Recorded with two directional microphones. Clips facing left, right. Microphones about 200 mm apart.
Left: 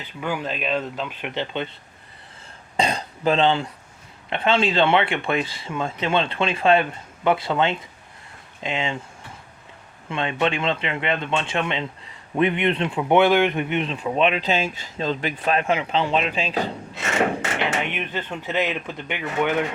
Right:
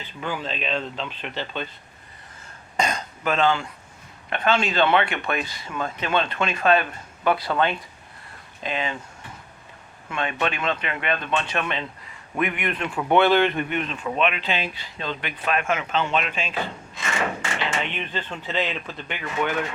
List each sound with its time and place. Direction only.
0.0 s speech: 10° left (ahead or behind)
2.7 s throat clearing: 30° left (ahead or behind)
4.3 s speech: 30° left (ahead or behind)
10.1 s speech: 25° left (ahead or behind)
12.4 s speech: 30° left (ahead or behind)
12.9 s speech: 15° left (ahead or behind)
14.4 s speech: 45° left (ahead or behind)
17.8 s speech: 10° left (ahead or behind)